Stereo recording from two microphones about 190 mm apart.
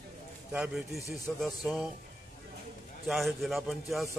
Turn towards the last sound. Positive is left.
turn(degrees=0)  # may be behind; listen again after turning